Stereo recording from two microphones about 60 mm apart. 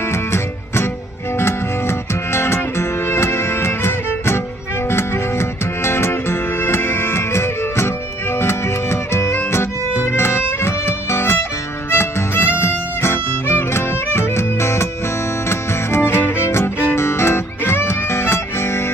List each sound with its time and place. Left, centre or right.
0.1 s music: left